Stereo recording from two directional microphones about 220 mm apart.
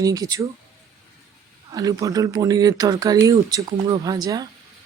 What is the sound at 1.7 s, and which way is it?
Speech, 15° right (ahead or behind).